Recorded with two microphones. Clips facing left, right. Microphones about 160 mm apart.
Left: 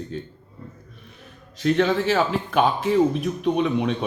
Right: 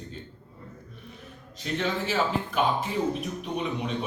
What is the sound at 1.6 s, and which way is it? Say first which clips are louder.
Speech: left 9 dB; 75° left (ahead or behind).